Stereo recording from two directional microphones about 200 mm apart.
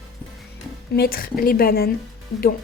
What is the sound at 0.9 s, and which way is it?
Speech, 50° left (ahead or behind).